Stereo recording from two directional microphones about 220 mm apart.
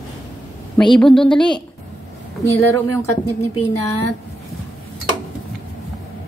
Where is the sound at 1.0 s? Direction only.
5° left (ahead or behind).